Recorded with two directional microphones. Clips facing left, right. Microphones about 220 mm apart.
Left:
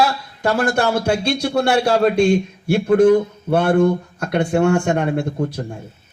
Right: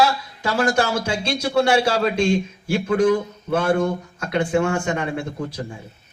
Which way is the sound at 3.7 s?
45° left (ahead or behind).